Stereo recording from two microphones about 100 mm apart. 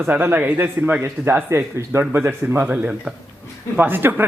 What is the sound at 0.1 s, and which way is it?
A man's voice, 20° right (ahead or behind).